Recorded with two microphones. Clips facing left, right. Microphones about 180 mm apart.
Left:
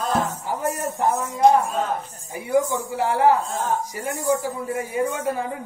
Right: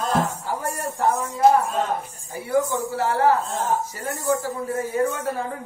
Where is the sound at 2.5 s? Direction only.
15° left (ahead or behind).